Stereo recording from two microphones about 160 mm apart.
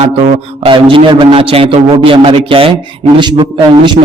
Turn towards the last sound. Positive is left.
turn(degrees=-30)  # may be behind; listen again after turning